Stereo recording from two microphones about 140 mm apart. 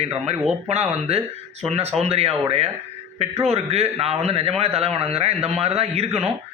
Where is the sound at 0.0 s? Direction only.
50° right (ahead or behind).